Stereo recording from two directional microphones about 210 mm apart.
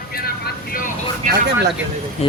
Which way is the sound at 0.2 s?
45° left (ahead or behind).